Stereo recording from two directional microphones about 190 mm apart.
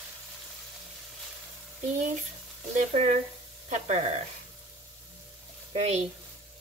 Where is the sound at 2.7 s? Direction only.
35° right (ahead or behind).